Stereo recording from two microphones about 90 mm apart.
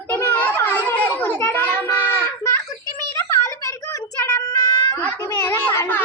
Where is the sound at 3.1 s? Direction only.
30° left (ahead or behind).